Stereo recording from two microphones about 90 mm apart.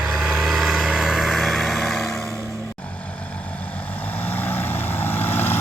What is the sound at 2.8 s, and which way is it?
Vehicle, 15° left (ahead or behind).